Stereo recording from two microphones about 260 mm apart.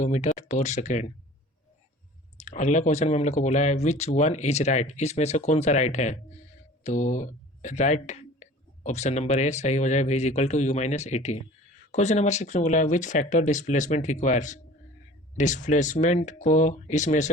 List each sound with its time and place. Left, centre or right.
0.0 s speech: left
2.4 s speech: left